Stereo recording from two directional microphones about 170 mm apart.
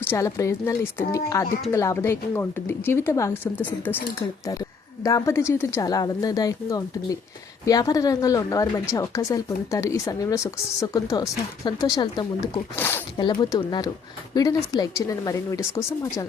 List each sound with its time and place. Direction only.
0.1 s a woman's voice: 20° left (ahead or behind)
5.0 s a woman's voice: 20° left (ahead or behind)
13.1 s a woman's voice: 25° left (ahead or behind)